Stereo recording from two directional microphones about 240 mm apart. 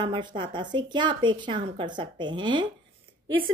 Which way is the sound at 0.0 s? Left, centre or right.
Centre.